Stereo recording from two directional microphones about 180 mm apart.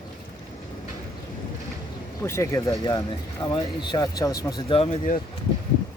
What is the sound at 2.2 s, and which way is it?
Speech, 15° left (ahead or behind).